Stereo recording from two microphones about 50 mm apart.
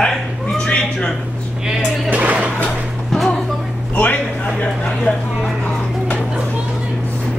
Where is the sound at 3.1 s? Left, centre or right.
Centre.